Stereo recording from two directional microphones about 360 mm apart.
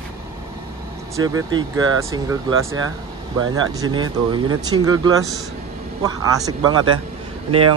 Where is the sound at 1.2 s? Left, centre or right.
Centre.